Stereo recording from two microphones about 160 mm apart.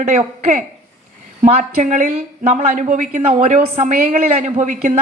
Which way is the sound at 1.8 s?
50° right (ahead or behind).